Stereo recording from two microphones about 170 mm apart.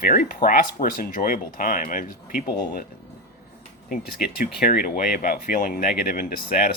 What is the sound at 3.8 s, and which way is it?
Speech, 60° left (ahead or behind).